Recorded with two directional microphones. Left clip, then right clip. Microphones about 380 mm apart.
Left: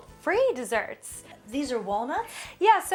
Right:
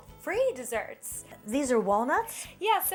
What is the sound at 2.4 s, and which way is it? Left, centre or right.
Speech, left.